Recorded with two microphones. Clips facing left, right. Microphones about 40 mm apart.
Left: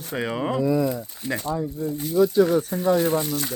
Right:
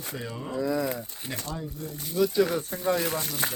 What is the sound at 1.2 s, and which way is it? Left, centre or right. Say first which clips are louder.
Speech: left 10 dB; centre.